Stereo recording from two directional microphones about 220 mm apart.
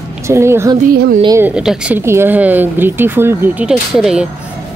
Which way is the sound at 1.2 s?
15° right (ahead or behind).